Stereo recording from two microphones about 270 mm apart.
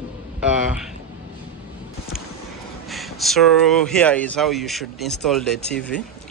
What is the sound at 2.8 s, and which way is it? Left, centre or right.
Speech, centre.